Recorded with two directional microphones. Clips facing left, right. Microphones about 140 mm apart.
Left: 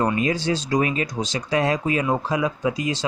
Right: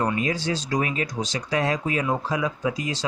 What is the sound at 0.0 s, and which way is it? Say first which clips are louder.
Speech: left 3 dB; 25° left (ahead or behind).